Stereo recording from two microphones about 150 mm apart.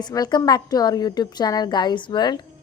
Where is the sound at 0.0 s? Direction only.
25° left (ahead or behind).